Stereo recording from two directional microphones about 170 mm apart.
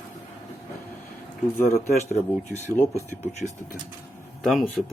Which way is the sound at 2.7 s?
10° left (ahead or behind).